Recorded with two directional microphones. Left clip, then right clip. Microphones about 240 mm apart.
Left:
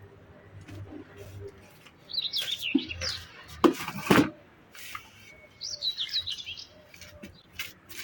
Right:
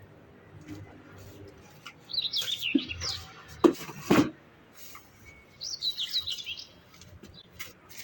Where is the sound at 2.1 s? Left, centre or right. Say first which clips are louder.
Even; centre.